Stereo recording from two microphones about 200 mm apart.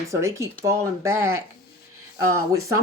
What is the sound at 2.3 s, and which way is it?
Speech, 15° right (ahead or behind).